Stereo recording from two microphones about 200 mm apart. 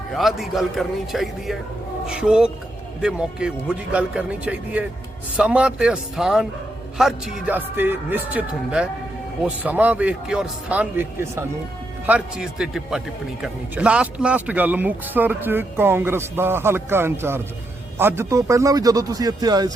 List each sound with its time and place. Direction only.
0.1 s speech: centre (ahead or behind); by 19.7 s 20° right (ahead or behind)